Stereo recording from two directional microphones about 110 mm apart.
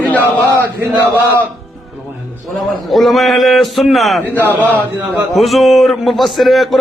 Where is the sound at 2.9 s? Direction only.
Centre (ahead or behind).